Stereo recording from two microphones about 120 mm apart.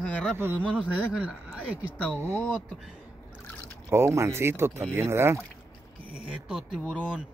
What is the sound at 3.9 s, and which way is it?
Speech, 20° right (ahead or behind).